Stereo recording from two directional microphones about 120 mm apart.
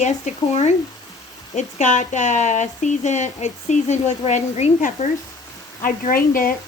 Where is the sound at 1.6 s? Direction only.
85° left.